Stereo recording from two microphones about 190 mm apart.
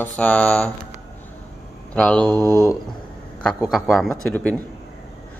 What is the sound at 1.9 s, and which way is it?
Speech, 5° left (ahead or behind).